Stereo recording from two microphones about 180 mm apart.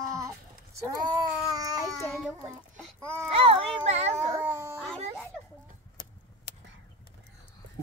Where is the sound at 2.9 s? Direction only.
15° right (ahead or behind).